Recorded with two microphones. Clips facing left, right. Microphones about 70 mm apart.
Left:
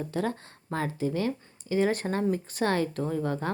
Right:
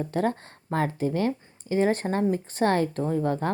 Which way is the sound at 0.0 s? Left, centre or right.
Right.